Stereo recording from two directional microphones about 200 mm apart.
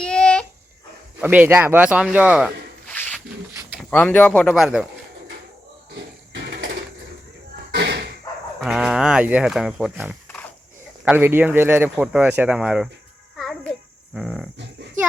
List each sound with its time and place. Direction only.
0.0 s a sound: 5° left (ahead or behind)
1.2 s speech: 10° right (ahead or behind)
2.8 s a sound: 5° left (ahead or behind)
3.5 s bird: 5° right (ahead or behind)
3.8 s speech: 5° left (ahead or behind)
4.5 s speech: 5° right (ahead or behind)
5.9 s music: 55° right (ahead or behind)
7.7 s slam: 55° right (ahead or behind)
8.6 s speech: 5° right (ahead or behind)
13.3 s music: centre (ahead or behind)
14.2 s speech: centre (ahead or behind)